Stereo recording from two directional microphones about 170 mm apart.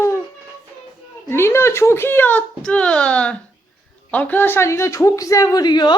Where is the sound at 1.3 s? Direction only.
15° left (ahead or behind).